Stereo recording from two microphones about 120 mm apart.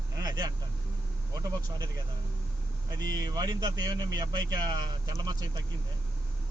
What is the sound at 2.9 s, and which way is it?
Speech, 35° right (ahead or behind).